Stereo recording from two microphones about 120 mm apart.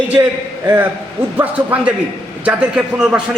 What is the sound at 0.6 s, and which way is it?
A man's voice, 20° right (ahead or behind).